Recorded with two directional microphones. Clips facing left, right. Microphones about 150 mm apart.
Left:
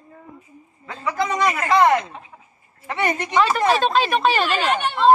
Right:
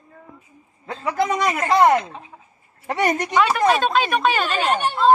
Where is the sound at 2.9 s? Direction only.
40° right (ahead or behind).